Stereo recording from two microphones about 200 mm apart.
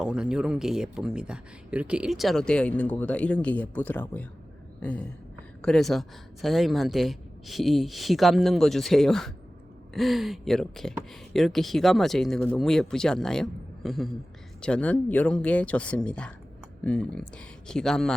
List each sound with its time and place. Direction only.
0.0 s speech: 5° right (ahead or behind)